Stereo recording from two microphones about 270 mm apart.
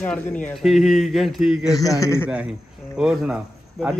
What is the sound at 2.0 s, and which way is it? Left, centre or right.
Speech, centre.